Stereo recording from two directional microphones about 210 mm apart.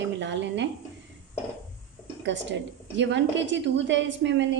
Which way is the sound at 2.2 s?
60° right (ahead or behind).